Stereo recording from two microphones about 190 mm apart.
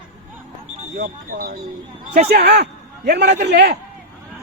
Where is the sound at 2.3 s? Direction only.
60° right (ahead or behind).